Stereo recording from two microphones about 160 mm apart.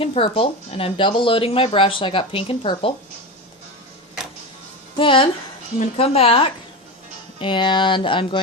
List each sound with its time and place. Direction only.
0.0 s speech: 35° left (ahead or behind)
4.9 s speech: 35° left (ahead or behind)